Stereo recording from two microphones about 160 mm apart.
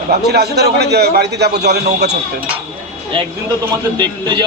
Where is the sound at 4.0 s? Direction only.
30° right (ahead or behind).